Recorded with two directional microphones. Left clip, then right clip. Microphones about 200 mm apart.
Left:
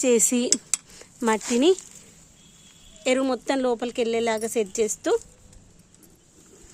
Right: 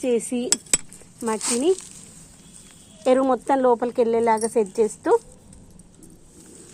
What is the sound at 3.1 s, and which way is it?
Speech, 25° left (ahead or behind).